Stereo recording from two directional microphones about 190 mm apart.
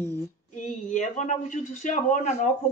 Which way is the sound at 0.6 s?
40° left (ahead or behind).